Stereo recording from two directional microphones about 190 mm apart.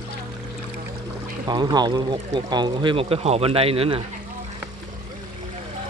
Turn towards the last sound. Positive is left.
turn(degrees=-30)  # may be behind; listen again after turning